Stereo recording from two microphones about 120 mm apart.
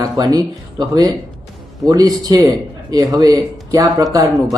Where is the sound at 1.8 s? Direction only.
30° right (ahead or behind).